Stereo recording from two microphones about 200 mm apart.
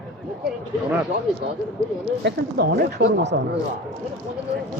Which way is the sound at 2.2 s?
55° right (ahead or behind).